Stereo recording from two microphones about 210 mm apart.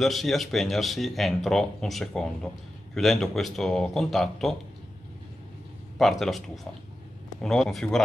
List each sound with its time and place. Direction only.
0.0 s speech: centre (ahead or behind)
5.9 s speech: centre (ahead or behind)